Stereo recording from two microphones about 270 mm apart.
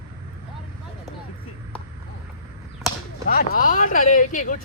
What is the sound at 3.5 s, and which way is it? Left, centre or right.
Speech, left.